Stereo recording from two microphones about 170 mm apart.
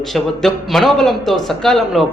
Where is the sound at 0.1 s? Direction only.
Centre (ahead or behind).